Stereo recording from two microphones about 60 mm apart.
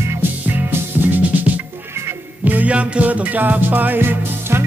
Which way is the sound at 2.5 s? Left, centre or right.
Right.